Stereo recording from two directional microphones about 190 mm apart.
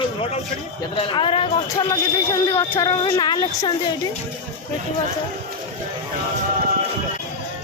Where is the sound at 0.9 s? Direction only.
25° left (ahead or behind).